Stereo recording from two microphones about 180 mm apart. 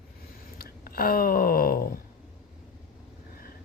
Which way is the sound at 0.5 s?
55° left (ahead or behind).